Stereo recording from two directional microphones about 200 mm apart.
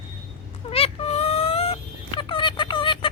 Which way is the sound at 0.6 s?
30° left (ahead or behind).